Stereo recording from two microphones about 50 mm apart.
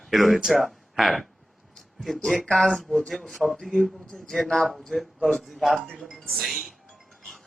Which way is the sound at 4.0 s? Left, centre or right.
Centre.